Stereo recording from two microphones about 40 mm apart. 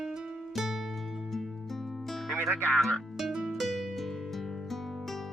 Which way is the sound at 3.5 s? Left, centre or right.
Centre.